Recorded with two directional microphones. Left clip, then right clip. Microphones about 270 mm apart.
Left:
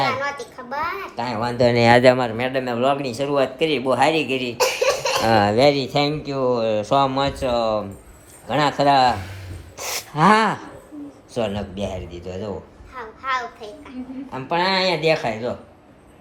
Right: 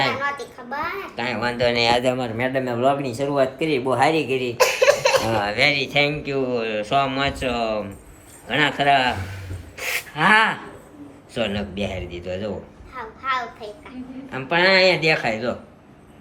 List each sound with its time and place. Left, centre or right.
0.5 s speech: centre
2.0 s speech: left
2.4 s speech: centre
5.3 s speech: left
5.5 s speech: centre
9.7 s gasp: left
10.2 s speech: left